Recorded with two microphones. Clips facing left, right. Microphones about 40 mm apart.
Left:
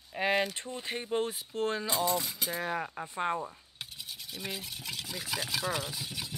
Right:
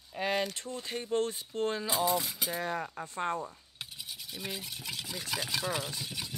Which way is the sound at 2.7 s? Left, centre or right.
Centre.